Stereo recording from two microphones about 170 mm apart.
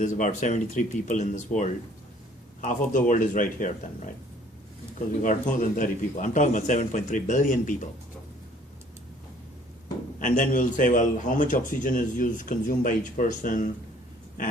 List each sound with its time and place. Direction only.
0.0 s speech: 45° left (ahead or behind)
5.2 s speech: 50° left (ahead or behind)
10.2 s speech: 50° left (ahead or behind)